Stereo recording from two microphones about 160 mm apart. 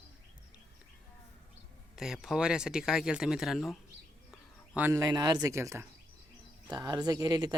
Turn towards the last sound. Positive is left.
turn(degrees=-25)  # may be behind; listen again after turning